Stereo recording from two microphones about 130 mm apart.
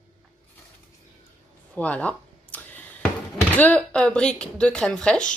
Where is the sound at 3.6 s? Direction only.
10° left (ahead or behind).